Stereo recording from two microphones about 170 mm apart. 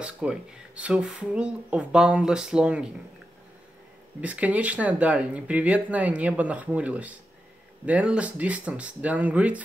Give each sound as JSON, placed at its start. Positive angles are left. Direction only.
{"t": 0.0, "sound": "speech", "side_deg": -5}
{"t": 4.2, "sound": "speech", "side_deg": -10}